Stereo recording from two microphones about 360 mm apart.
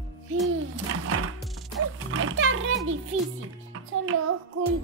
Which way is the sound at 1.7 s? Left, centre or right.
Right.